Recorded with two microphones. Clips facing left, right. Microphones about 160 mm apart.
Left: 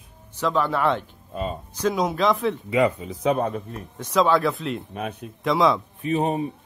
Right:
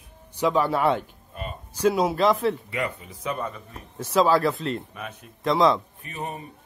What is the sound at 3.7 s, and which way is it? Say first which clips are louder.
Speech: even; 5° right (ahead or behind).